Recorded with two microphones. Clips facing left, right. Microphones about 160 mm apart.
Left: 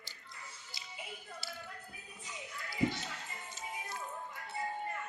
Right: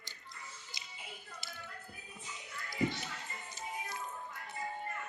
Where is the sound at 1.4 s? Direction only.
20° right (ahead or behind).